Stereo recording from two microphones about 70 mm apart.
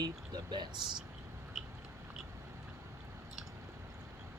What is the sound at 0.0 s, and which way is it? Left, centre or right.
Speech, right.